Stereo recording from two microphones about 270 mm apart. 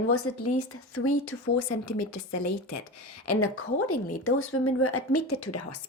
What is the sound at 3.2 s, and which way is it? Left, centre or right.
A woman's voice, left.